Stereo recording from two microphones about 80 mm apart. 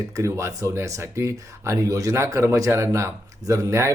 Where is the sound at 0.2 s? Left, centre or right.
Right.